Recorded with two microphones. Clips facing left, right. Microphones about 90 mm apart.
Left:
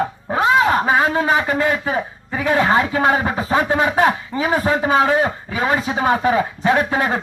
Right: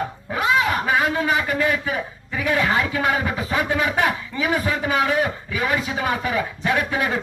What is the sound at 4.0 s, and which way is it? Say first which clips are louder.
A man's voice: left 5 dB; 35° left (ahead or behind).